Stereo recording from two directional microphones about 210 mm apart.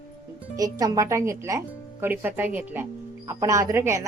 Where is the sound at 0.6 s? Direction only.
15° right (ahead or behind).